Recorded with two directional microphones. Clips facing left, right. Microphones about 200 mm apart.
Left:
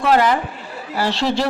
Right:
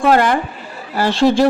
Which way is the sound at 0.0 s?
50° right (ahead or behind).